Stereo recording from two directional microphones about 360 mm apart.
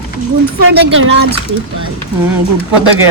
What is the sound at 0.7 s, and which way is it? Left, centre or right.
Speech, right.